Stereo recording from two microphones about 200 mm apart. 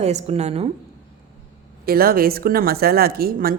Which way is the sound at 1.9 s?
50° right (ahead or behind).